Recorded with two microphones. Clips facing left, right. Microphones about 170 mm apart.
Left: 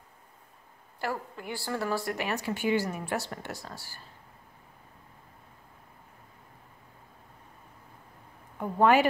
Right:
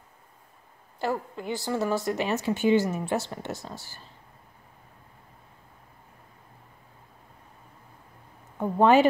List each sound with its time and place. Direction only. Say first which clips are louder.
1.0 s a woman's voice: right 5 dB; 20° right (ahead or behind)
8.5 s speech: right 3 dB; 25° right (ahead or behind)